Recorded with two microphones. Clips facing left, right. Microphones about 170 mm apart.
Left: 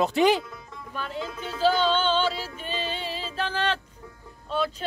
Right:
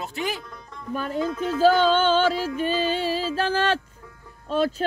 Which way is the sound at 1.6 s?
45° right (ahead or behind).